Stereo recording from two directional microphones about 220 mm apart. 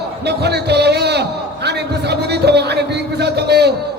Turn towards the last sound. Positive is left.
turn(degrees=-50)  # may be behind; listen again after turning